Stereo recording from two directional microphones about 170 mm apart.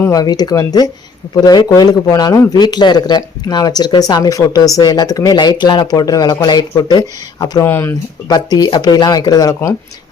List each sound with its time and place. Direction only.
0.0 s a man's voice: 20° left (ahead or behind)
7.7 s speech: 10° left (ahead or behind)
8.3 s a man's voice: 25° left (ahead or behind)